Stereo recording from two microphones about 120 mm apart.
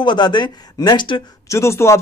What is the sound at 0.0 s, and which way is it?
A man's voice, 40° left (ahead or behind).